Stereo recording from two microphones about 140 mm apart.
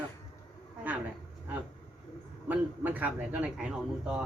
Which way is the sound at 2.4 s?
15° right (ahead or behind).